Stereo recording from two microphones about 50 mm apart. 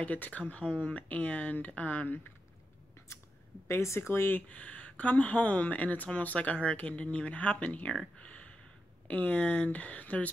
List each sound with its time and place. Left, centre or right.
0.0 s speech: left
3.6 s speech: left
4.4 s speech: left
8.2 s a sound: left
9.0 s speech: left